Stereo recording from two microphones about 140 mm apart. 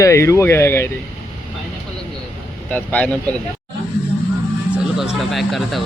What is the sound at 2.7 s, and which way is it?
Speech, 10° left (ahead or behind).